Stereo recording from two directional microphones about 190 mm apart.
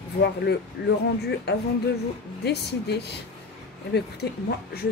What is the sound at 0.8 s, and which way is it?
A woman's voice, 65° left (ahead or behind).